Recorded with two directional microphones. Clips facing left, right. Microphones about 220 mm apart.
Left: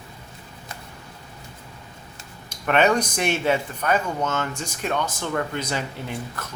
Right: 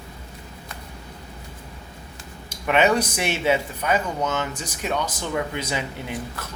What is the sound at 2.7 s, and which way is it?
Speech, 10° right (ahead or behind).